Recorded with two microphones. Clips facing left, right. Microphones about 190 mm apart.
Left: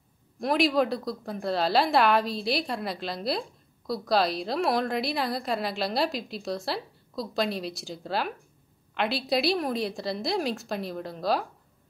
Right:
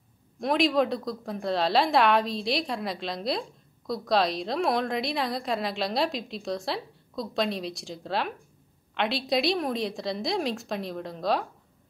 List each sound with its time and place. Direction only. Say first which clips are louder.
0.4 s a woman's voice: even; centre (ahead or behind)